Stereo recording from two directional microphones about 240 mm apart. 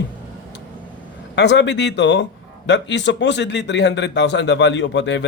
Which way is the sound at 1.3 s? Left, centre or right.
Left.